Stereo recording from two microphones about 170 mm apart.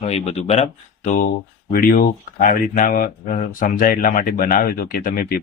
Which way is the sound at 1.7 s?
55° left (ahead or behind).